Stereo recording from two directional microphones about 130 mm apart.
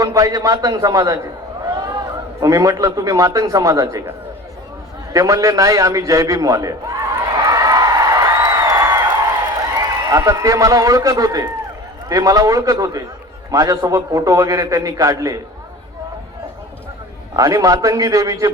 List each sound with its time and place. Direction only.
0.0 s a man's voice: 30° right (ahead or behind)
5.1 s a sound: 25° right (ahead or behind)
10.1 s a man's voice: 25° right (ahead or behind)
17.3 s a man's voice: 25° right (ahead or behind)